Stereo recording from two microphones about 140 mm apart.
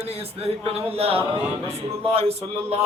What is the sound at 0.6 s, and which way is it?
Speech, 45° right (ahead or behind).